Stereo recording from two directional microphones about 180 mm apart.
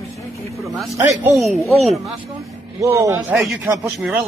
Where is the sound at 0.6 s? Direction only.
Centre (ahead or behind).